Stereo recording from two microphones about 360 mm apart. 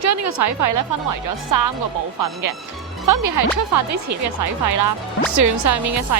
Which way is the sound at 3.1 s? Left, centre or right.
Right.